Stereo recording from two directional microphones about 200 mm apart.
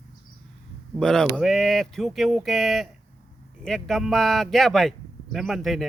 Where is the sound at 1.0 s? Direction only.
5° left (ahead or behind).